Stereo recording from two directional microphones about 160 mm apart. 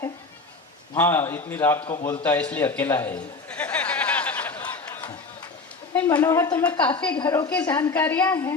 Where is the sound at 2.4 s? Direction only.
10° left (ahead or behind).